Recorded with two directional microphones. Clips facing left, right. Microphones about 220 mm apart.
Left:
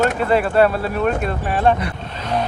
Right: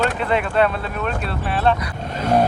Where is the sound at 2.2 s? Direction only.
45° right (ahead or behind).